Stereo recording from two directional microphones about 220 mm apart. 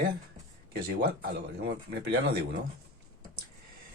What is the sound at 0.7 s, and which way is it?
Speech, 45° right (ahead or behind).